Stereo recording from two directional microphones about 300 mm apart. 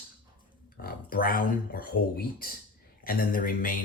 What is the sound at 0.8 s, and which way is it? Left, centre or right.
Speech, left.